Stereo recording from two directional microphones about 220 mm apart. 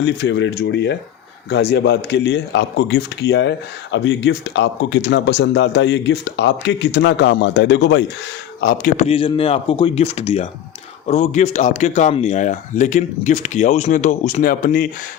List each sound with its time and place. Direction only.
0.0 s speech: 55° left (ahead or behind)
8.6 s speech: 35° left (ahead or behind)